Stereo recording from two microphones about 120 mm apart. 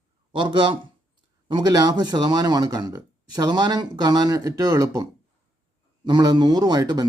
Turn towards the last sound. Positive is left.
turn(degrees=-35)  # may be behind; listen again after turning